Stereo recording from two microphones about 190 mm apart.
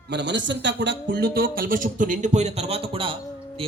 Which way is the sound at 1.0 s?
55° right (ahead or behind).